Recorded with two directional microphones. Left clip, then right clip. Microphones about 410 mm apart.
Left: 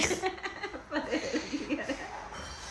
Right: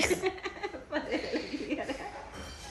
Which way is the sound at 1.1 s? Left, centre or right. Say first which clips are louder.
Left 2 dB; centre.